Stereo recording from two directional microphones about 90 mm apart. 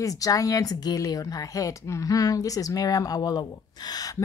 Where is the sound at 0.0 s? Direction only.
40° left (ahead or behind).